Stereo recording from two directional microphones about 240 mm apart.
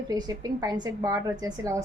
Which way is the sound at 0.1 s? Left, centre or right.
Centre.